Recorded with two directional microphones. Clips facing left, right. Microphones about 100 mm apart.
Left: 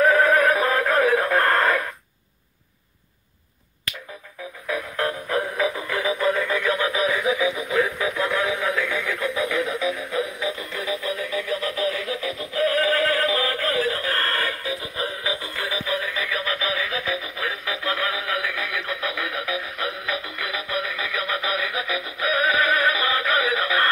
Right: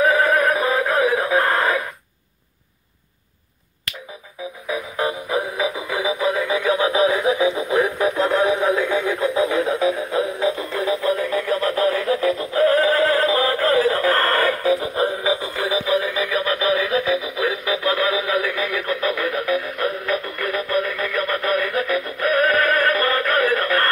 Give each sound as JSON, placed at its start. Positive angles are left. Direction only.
{"t": 0.0, "sound": "synthetic singing", "side_deg": -5}
{"t": 4.6, "sound": "music", "side_deg": -10}
{"t": 7.3, "sound": "radio", "side_deg": -30}
{"t": 17.1, "sound": "synthetic singing", "side_deg": -5}